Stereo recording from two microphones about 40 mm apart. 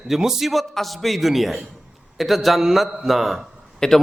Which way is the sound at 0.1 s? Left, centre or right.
Centre.